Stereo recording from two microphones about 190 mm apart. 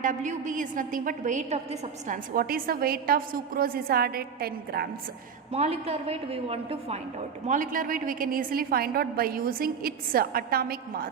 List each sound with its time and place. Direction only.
0.0 s a woman's voice: 40° right (ahead or behind)
5.5 s a woman's voice: 35° right (ahead or behind)
7.4 s a woman's voice: 40° right (ahead or behind)